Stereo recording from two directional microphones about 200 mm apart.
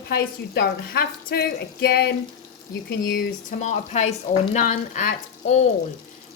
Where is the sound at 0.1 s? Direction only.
50° left (ahead or behind).